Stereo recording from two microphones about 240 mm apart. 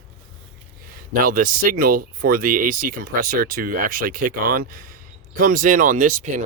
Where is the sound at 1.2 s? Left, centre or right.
Right.